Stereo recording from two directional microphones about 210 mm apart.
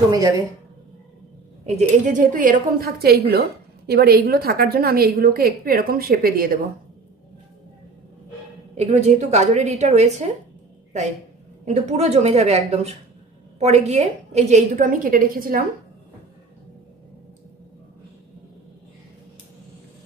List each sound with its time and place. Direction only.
0.1 s a woman's voice: 20° right (ahead or behind)
1.7 s speech: 35° right (ahead or behind)
8.7 s a woman's voice: 35° right (ahead or behind)